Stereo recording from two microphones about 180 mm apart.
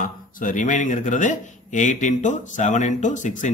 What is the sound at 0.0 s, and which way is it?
Speech, 50° left (ahead or behind).